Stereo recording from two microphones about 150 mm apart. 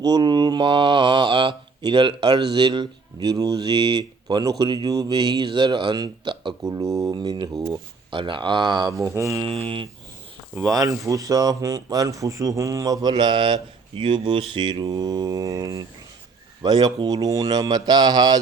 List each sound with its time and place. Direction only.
0.0 s speech: 30° right (ahead or behind)
9.5 s a sound: 40° right (ahead or behind)
10.5 s speech: 25° right (ahead or behind)